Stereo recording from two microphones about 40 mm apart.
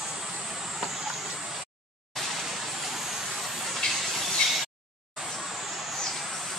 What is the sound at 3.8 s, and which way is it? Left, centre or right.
Train, centre.